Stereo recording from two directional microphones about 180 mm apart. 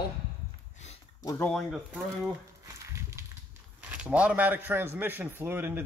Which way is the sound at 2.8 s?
15° right (ahead or behind).